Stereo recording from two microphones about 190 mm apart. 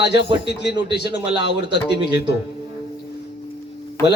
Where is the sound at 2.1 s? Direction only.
60° left (ahead or behind).